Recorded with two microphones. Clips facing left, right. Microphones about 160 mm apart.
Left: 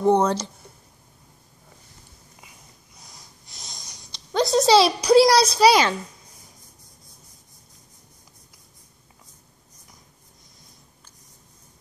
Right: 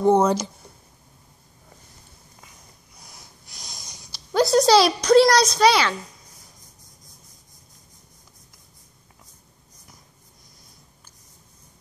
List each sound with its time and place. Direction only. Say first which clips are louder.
0.0 s speech: right 1 dB; 5° right (ahead or behind)
3.0 s snort: right 1 dB; centre (ahead or behind)
4.1 s a woman's voice: right 2 dB; 5° right (ahead or behind); by 5.9 s 15° left (ahead or behind)